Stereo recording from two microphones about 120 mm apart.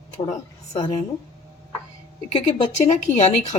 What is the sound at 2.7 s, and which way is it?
Speech, 75° left (ahead or behind).